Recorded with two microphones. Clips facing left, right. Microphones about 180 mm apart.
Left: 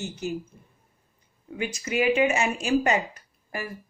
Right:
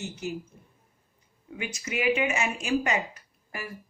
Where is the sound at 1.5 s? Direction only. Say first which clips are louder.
Left 6 dB; 35° left (ahead or behind).